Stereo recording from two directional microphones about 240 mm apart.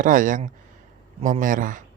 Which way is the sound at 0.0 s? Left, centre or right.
Right.